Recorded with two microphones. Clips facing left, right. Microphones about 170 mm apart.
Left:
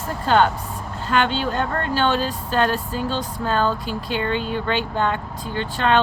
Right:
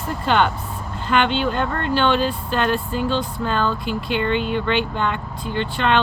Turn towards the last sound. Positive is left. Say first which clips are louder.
# even
turn(degrees=40)  # may be behind; listen again after turning